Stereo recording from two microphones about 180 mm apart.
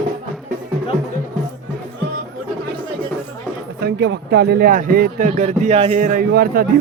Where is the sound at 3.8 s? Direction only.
65° right (ahead or behind); by 6.2 s 45° right (ahead or behind).